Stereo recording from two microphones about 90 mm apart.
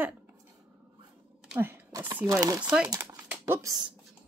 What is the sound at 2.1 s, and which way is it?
Speech, 30° right (ahead or behind).